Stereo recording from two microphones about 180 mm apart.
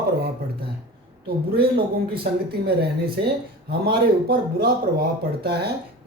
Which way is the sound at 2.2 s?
60° right (ahead or behind).